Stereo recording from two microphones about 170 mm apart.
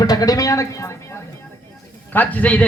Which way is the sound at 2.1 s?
10° left (ahead or behind).